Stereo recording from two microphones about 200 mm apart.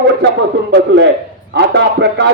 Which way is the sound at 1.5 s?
60° right (ahead or behind).